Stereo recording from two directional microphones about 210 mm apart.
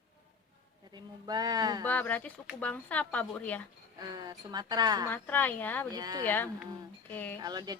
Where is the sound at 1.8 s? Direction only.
10° left (ahead or behind).